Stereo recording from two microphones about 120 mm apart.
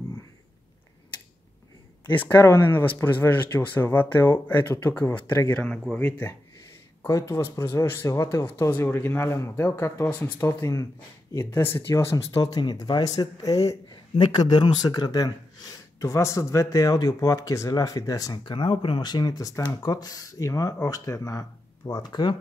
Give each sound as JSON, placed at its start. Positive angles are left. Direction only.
{"t": 2.1, "sound": "speech", "side_deg": 20}
{"t": 7.1, "sound": "speech", "side_deg": 30}